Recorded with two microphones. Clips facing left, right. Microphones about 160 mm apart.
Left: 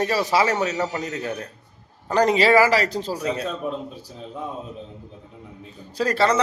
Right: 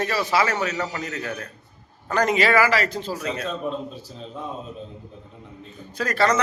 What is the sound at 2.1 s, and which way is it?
Speech, 35° left (ahead or behind).